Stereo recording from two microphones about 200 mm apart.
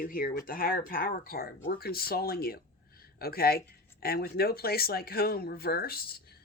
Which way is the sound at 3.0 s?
50° left (ahead or behind).